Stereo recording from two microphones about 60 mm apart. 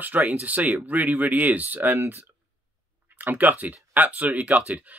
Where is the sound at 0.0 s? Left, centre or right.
Right.